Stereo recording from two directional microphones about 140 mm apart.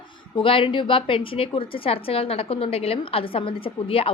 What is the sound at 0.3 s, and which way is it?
A woman's voice, 40° left (ahead or behind).